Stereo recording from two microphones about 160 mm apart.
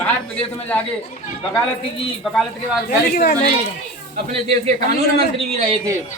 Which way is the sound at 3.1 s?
70° left (ahead or behind).